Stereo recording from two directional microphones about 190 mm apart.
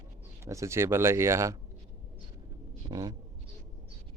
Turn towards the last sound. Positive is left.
turn(degrees=-20)  # may be behind; listen again after turning